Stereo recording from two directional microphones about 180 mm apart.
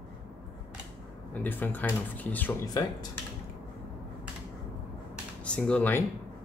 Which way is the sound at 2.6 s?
20° left (ahead or behind).